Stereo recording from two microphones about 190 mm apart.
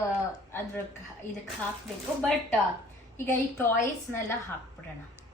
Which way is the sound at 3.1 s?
10° left (ahead or behind).